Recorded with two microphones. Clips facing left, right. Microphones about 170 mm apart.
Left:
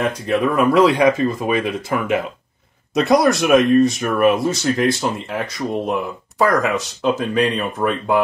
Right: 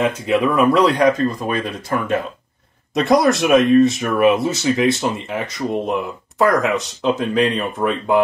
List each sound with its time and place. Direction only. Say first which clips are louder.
0.0 s speech: right 1 dB; centre (ahead or behind)